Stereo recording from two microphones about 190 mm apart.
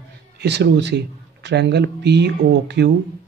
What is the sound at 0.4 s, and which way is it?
Speech, 65° right (ahead or behind).